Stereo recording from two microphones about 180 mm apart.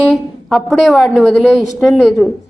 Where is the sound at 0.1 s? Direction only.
Centre (ahead or behind).